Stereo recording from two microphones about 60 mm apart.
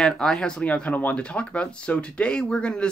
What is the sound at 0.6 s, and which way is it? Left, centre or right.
Speech, left.